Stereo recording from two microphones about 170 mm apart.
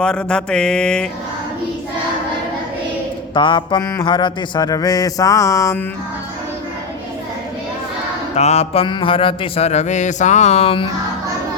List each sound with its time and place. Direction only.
0.0 s mantra: 5° left (ahead or behind)
3.3 s mantra: 30° left (ahead or behind)
8.4 s a sound: 40° left (ahead or behind)